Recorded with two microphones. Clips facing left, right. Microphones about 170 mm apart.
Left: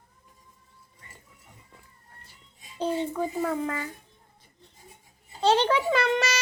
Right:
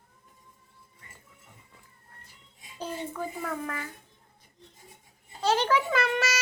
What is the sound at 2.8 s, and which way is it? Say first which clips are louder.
Speech: left 7 dB; 30° left (ahead or behind).